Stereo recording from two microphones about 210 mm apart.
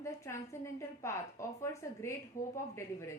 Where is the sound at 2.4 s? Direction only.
40° left (ahead or behind).